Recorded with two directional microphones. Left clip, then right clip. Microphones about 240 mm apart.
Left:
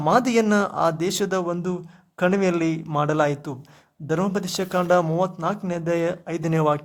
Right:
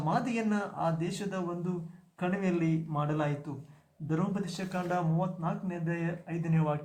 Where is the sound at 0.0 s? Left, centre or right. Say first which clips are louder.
Left 13 dB; left.